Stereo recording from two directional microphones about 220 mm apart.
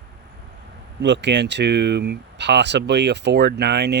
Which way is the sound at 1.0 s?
55° right (ahead or behind).